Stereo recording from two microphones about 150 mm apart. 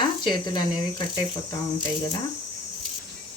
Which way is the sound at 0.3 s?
30° left (ahead or behind).